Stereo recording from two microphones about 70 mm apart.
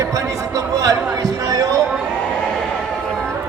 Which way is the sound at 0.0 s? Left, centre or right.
Right.